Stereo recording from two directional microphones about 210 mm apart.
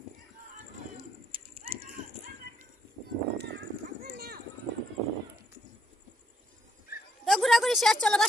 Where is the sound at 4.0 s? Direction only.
45° right (ahead or behind).